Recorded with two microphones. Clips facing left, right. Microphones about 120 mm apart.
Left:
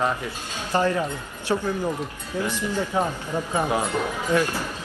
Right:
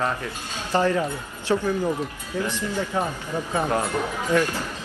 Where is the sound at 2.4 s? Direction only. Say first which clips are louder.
Left 2 dB; 15° left (ahead or behind).